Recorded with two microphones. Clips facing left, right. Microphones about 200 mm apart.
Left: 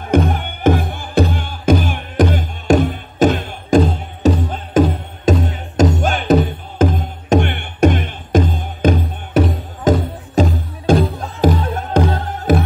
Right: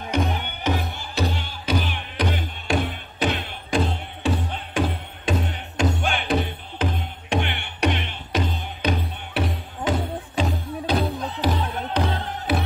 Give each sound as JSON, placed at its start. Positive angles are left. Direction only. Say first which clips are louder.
{"t": 0.1, "sound": "music", "louder": "left 9 dB", "side_deg": 50}